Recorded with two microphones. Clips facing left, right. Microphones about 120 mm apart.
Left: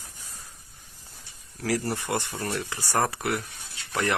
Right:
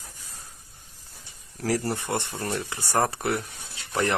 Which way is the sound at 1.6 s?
30° right (ahead or behind).